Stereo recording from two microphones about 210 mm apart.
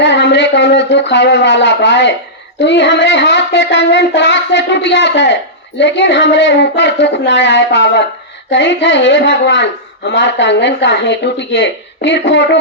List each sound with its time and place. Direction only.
0.0 s child singing: 55° left (ahead or behind)